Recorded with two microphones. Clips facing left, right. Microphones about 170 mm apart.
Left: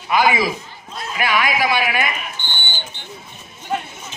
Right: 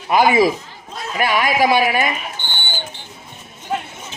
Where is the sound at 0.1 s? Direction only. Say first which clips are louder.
Right 4 dB; 45° right (ahead or behind).